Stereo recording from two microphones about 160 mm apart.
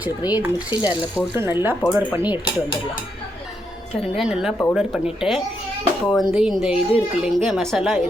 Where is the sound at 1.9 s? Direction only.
15° right (ahead or behind).